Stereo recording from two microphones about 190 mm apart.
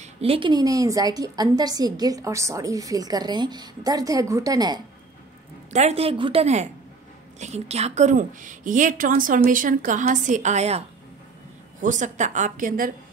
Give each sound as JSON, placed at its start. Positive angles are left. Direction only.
{"t": 0.0, "sound": "a woman's voice", "side_deg": -30}
{"t": 5.7, "sound": "a woman's voice", "side_deg": -35}
{"t": 11.8, "sound": "a woman's voice", "side_deg": -40}